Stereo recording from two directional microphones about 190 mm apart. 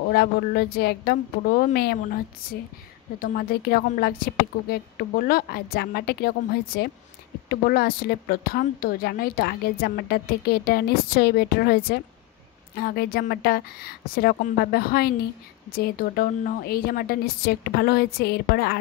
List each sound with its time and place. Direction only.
0.1 s a woman's voice: 55° left (ahead or behind)
3.2 s a woman's voice: 50° left (ahead or behind)